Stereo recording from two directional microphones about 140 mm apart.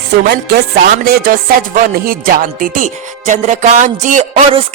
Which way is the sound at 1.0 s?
90° right.